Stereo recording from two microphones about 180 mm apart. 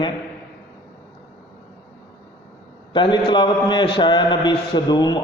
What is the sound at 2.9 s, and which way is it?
A man's voice, 25° left (ahead or behind).